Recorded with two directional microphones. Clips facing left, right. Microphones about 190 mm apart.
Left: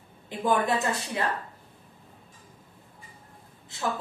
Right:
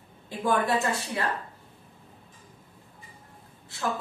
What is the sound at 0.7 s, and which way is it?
Speech, 15° left (ahead or behind).